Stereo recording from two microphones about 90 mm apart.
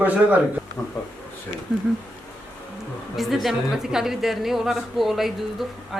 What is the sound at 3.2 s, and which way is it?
A woman's voice, centre (ahead or behind).